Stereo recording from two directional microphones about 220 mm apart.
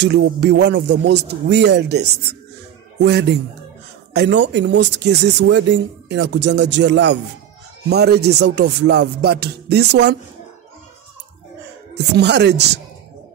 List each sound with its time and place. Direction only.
0.0 s speech: 50° right (ahead or behind)
12.2 s speech: 50° right (ahead or behind)